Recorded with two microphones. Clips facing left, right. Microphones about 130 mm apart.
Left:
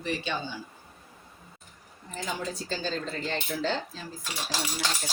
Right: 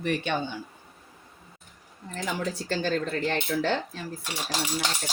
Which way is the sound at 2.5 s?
65° right (ahead or behind).